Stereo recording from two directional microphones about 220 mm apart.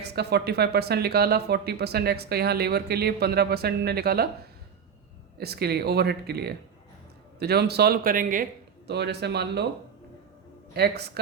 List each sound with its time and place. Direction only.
0.0 s speech: 50° right (ahead or behind)
5.4 s speech: 45° right (ahead or behind)
8.9 s speech: 50° right (ahead or behind)
10.8 s speech: 45° right (ahead or behind)